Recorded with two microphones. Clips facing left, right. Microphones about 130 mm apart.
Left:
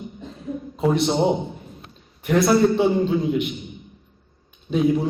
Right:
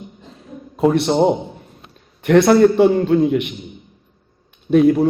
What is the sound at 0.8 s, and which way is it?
Speech, centre (ahead or behind).